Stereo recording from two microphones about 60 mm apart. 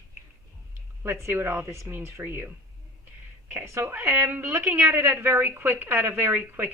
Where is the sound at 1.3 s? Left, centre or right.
Right.